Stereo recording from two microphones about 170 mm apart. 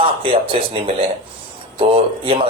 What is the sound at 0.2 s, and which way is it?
A man's voice, 30° right (ahead or behind).